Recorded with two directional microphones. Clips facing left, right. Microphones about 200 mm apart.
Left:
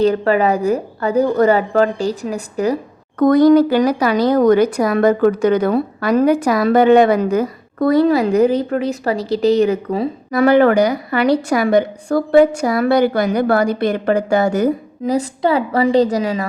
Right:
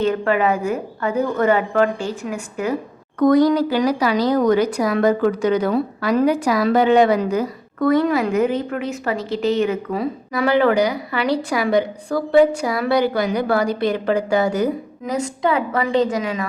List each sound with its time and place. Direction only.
0.0 s a woman's voice: 35° left (ahead or behind)
3.2 s a woman's voice: 55° left (ahead or behind)
7.8 s a woman's voice: 35° left (ahead or behind)
10.3 s a woman's voice: 50° left (ahead or behind)
15.0 s a woman's voice: 35° left (ahead or behind)